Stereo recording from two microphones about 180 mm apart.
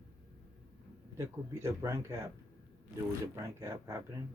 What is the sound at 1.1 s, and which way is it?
Speech, 15° right (ahead or behind).